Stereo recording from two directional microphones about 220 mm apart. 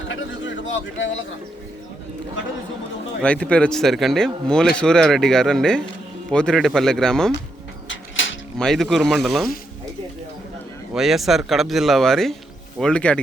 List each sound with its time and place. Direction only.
0.9 s speech: 55° left (ahead or behind)
3.2 s speech: 5° left (ahead or behind)
7.9 s a sound: 60° left (ahead or behind)
8.5 s speech: centre (ahead or behind)
10.9 s speech: centre (ahead or behind)